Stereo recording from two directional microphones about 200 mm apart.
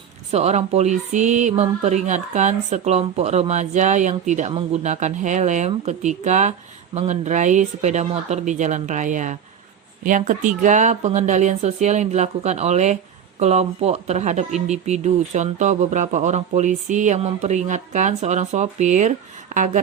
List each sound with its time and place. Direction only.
0.3 s speech: 35° right (ahead or behind)